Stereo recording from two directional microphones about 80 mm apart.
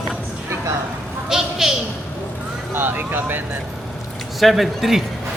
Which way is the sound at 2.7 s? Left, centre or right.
Right.